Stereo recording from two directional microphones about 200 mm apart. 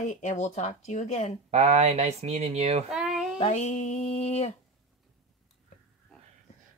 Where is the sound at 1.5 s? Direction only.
35° right (ahead or behind).